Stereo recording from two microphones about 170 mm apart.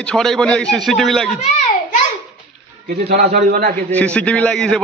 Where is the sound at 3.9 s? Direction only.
5° left (ahead or behind).